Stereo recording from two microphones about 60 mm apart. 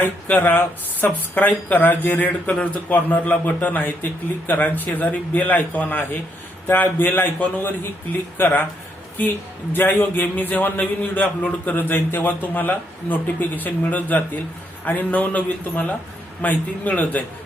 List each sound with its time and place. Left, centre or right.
0.0 s a man's voice: left